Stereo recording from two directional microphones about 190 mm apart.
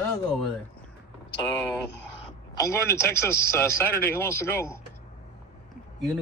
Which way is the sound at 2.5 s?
15° left (ahead or behind).